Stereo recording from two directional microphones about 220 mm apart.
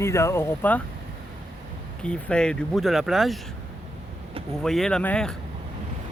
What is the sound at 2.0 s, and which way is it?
Speech, 5° left (ahead or behind).